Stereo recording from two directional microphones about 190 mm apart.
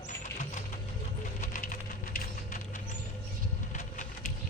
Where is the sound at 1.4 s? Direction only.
45° left (ahead or behind).